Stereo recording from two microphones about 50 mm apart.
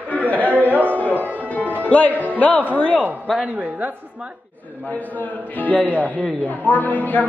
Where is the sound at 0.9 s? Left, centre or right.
Left.